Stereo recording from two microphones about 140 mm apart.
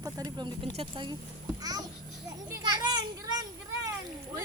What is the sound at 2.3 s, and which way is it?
Children playing, 25° right (ahead or behind).